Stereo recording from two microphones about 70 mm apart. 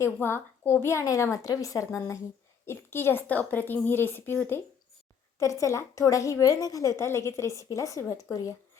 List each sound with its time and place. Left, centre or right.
0.0 s a woman's voice: left
1.0 s a woman's voice: left
2.6 s a woman's voice: left
5.4 s a woman's voice: left